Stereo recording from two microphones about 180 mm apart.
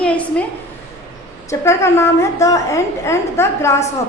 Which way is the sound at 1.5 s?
15° left (ahead or behind).